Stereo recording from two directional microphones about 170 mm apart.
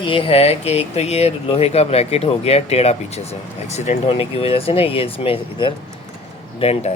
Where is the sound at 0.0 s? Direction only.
30° left (ahead or behind).